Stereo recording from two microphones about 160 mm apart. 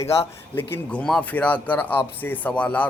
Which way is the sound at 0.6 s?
15° left (ahead or behind).